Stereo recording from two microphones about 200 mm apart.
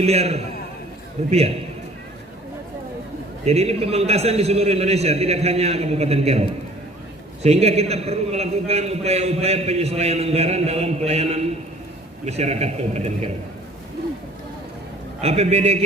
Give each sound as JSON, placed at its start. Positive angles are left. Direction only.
{"t": 0.0, "sound": "a man's voice", "side_deg": -30}
{"t": 3.4, "sound": "a man's voice", "side_deg": -30}
{"t": 7.4, "sound": "a man's voice", "side_deg": -30}
{"t": 15.2, "sound": "a man's voice", "side_deg": -30}